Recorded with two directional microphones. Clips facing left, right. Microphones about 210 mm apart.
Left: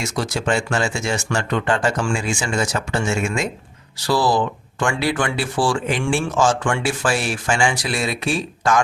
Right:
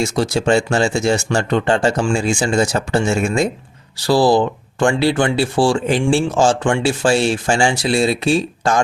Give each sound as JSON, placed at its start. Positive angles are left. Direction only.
{"t": 0.0, "sound": "speech", "side_deg": -30}